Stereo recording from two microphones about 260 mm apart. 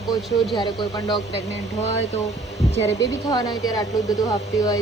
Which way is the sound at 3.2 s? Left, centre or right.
Centre.